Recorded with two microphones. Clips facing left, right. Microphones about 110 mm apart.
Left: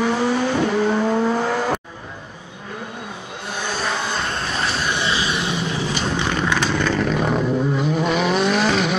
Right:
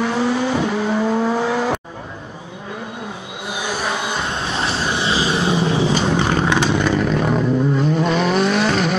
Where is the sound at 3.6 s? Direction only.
10° right (ahead or behind); by 6.5 s 30° right (ahead or behind).